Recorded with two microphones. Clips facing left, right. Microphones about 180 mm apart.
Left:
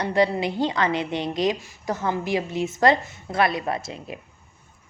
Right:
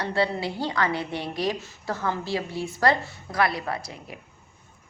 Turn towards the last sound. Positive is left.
turn(degrees=20)  # may be behind; listen again after turning